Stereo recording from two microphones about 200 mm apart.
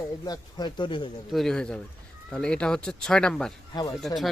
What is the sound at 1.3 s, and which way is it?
Speech, centre (ahead or behind).